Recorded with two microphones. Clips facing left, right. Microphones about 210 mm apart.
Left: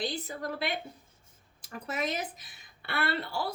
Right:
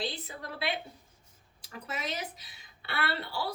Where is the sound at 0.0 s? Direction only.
45° left (ahead or behind).